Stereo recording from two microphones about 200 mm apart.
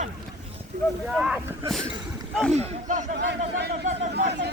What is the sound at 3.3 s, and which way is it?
Speech, 55° right (ahead or behind).